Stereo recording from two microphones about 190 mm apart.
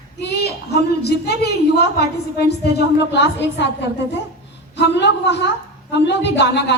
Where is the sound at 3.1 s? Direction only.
65° left (ahead or behind).